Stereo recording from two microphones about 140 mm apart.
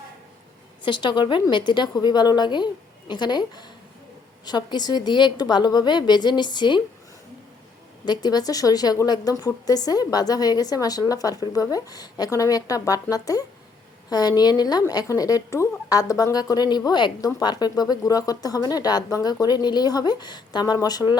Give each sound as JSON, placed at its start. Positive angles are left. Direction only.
{"t": 0.9, "sound": "a woman's voice", "side_deg": 35}
{"t": 8.0, "sound": "a woman's voice", "side_deg": 30}